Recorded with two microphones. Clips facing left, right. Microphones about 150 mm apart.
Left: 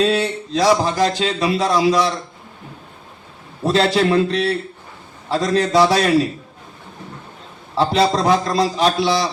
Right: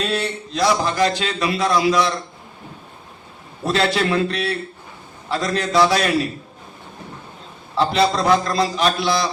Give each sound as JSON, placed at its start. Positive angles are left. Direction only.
{"t": 0.0, "sound": "speech", "side_deg": 40}
{"t": 3.7, "sound": "speech", "side_deg": 35}
{"t": 7.8, "sound": "speech", "side_deg": 35}